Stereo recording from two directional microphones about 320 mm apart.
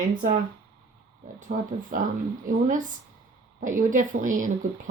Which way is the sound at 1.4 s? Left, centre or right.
Right.